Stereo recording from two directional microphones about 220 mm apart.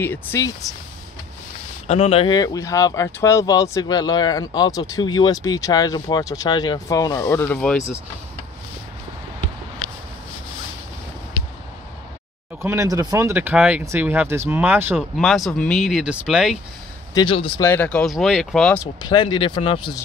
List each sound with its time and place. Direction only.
0.0 s speech: 10° left (ahead or behind)
1.9 s speech: 25° left (ahead or behind); by 7.8 s 5° left (ahead or behind)
12.6 s speech: 15° right (ahead or behind)
17.1 s speech: 20° left (ahead or behind)
17.6 s speech: 5° left (ahead or behind)
18.9 s speech: 20° left (ahead or behind)